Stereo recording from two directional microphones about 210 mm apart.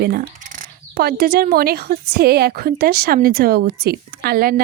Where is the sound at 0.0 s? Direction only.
45° right (ahead or behind).